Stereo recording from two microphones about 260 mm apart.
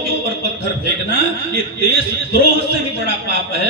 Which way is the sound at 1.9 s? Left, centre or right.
Right.